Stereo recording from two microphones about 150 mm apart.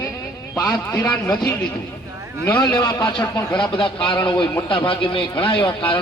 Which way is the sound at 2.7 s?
30° left (ahead or behind).